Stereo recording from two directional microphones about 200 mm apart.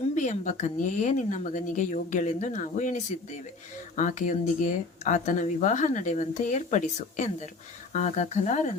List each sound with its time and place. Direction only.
0.1 s speech: 35° left (ahead or behind)